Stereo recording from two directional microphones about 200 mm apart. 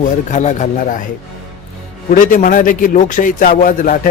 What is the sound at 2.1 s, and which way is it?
Music, 40° left (ahead or behind).